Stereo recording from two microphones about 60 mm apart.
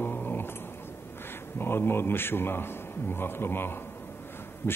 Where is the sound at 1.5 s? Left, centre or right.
Left.